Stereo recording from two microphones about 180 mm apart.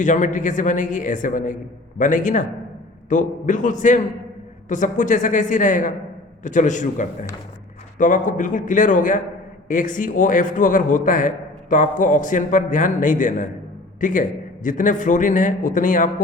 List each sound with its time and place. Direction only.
0.0 s a man's voice: 45° left (ahead or behind)